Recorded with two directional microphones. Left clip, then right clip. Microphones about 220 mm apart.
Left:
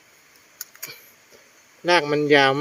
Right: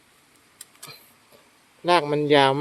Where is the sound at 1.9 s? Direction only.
Centre (ahead or behind).